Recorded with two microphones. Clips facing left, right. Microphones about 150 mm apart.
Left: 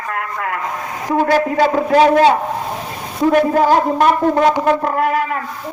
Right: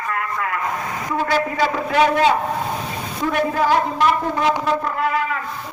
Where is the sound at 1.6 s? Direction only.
35° left (ahead or behind).